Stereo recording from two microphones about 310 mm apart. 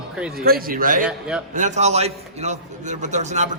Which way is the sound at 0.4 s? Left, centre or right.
Right.